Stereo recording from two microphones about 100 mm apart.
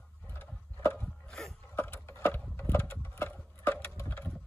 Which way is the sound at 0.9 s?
10° left (ahead or behind).